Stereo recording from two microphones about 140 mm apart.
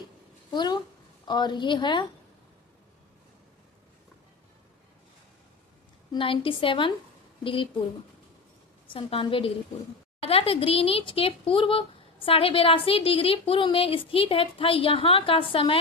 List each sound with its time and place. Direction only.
0.5 s speech: 30° left (ahead or behind)
6.1 s speech: 40° left (ahead or behind)
8.9 s speech: 40° left (ahead or behind)